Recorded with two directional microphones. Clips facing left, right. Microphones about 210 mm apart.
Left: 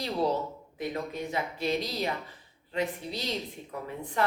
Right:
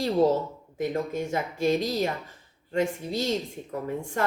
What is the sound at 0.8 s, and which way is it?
Speech, 45° right (ahead or behind).